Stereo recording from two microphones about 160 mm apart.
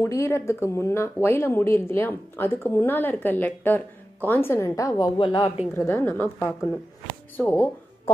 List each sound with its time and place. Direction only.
0.0 s a woman's voice: 15° left (ahead or behind)